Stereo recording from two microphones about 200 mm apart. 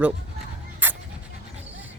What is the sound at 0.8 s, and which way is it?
Dog, 10° right (ahead or behind).